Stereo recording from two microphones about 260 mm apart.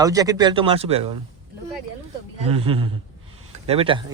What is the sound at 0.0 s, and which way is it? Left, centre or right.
Speech, centre.